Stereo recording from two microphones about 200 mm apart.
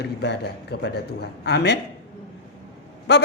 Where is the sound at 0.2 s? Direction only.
55° left (ahead or behind).